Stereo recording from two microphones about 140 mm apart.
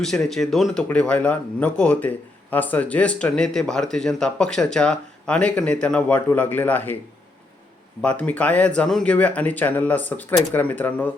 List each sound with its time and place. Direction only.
0.0 s speech: centre (ahead or behind)
8.0 s speech: 10° left (ahead or behind)